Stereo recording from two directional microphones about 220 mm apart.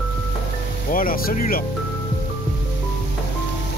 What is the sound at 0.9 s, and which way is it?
Speech, 40° left (ahead or behind).